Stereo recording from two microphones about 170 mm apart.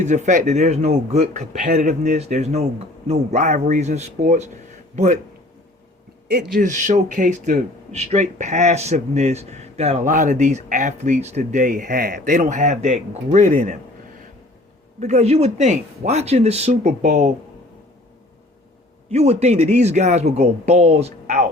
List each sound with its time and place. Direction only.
0.0 s speech: 45° right (ahead or behind)
6.6 s speech: 45° right (ahead or behind)
14.9 s speech: 40° right (ahead or behind)
19.1 s speech: 40° right (ahead or behind)